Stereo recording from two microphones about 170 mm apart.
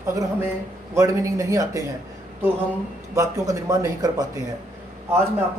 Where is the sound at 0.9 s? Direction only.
15° right (ahead or behind).